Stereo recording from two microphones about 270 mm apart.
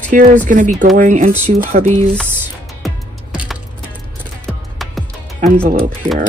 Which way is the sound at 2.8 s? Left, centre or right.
Centre.